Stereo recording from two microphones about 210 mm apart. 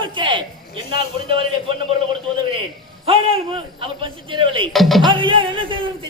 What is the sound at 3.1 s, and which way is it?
A man's voice, 25° right (ahead or behind).